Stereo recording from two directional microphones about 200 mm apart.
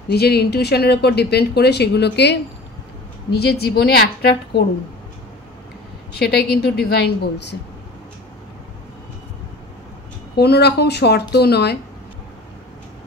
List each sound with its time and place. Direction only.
0.1 s speech: 55° left (ahead or behind)
3.3 s a woman's voice: 55° left (ahead or behind)
6.1 s a woman's voice: 50° left (ahead or behind)
10.3 s speech: 55° left (ahead or behind)